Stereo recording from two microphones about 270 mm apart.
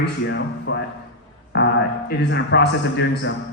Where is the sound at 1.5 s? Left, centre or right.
Left.